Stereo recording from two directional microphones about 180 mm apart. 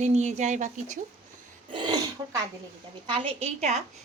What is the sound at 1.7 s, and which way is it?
Throat clearing, 25° right (ahead or behind).